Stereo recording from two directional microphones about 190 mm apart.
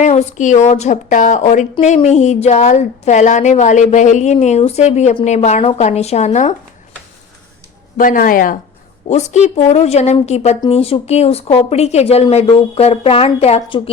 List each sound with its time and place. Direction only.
0.0 s a woman's voice: 35° left (ahead or behind)
7.9 s a woman's voice: 45° left (ahead or behind); by 13.9 s 30° left (ahead or behind)